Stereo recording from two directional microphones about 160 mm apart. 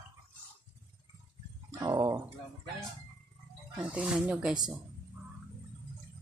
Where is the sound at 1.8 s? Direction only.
25° right (ahead or behind).